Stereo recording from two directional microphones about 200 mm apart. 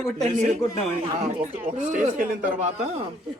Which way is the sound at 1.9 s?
40° right (ahead or behind).